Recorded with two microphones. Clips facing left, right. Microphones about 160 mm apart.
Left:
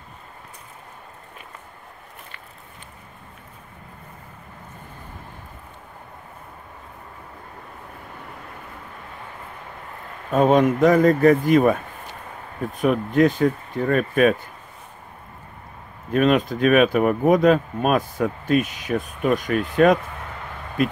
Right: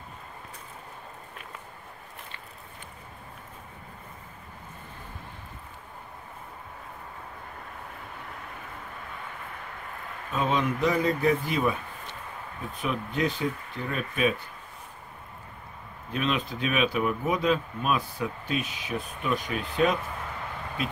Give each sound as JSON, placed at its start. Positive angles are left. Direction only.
{"t": 10.3, "sound": "speech", "side_deg": 45}
{"t": 12.8, "sound": "speech", "side_deg": 50}
{"t": 16.1, "sound": "speech", "side_deg": 50}